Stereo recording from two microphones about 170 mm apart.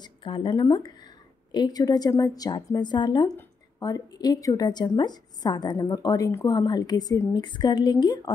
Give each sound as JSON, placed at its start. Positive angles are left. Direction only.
{"t": 0.0, "sound": "a woman's voice", "side_deg": 30}